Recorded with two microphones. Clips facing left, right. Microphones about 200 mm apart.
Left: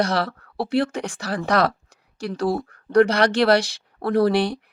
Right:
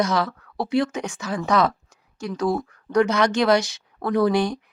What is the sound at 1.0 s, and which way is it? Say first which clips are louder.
Speech: even; 35° left (ahead or behind).